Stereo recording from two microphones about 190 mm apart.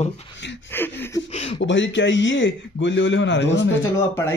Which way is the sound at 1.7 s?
75° left (ahead or behind).